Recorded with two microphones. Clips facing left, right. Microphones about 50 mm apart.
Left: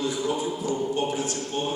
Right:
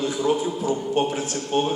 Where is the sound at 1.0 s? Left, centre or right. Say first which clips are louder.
Right 3 dB; right.